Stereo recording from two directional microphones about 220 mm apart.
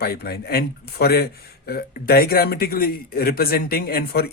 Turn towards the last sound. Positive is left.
turn(degrees=45)  # may be behind; listen again after turning